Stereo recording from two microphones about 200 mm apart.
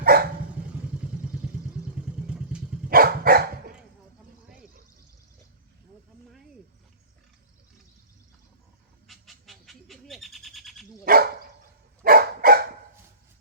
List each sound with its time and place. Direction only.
0.0 s dog: 50° right (ahead or behind)
0.6 s vehicle: 5° right (ahead or behind)
2.2 s vehicle: 5° right (ahead or behind)
2.9 s dog: 50° right (ahead or behind)
9.0 s bird: centre (ahead or behind)
11.0 s dog: 45° right (ahead or behind)